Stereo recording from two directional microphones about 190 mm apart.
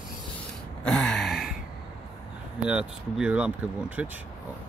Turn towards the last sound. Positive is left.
turn(degrees=-5)  # may be behind; listen again after turning